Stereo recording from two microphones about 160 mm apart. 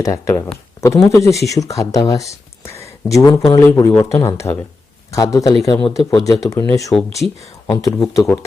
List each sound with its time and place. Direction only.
0.0 s speech: 15° left (ahead or behind)